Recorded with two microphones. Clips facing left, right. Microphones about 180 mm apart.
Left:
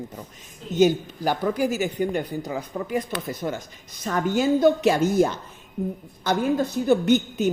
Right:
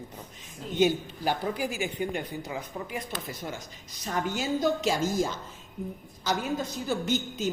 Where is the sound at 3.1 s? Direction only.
65° left (ahead or behind).